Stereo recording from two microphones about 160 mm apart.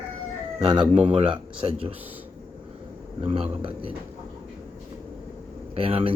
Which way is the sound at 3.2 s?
40° right (ahead or behind).